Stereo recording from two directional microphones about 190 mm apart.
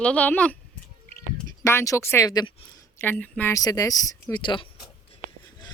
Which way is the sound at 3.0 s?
10° left (ahead or behind).